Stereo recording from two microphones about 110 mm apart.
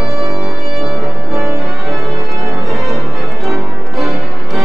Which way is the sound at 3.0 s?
Centre (ahead or behind).